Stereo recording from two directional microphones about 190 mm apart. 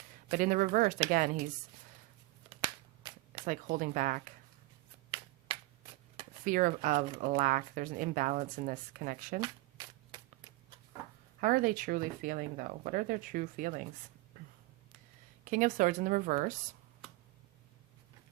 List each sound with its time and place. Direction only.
0.3 s speech: 45° right (ahead or behind)
2.6 s finger snapping: 20° right (ahead or behind)
3.4 s speech: 45° right (ahead or behind)
5.5 s finger snapping: 30° right (ahead or behind)
6.4 s speech: 45° right (ahead or behind)
9.4 s a sound: 25° right (ahead or behind)
11.3 s speech: 45° right (ahead or behind)
15.4 s speech: 45° right (ahead or behind)